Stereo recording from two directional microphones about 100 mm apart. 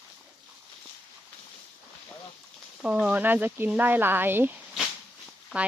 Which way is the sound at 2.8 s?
10° right (ahead or behind).